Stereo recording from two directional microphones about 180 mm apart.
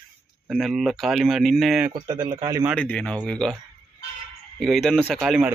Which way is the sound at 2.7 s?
5° left (ahead or behind).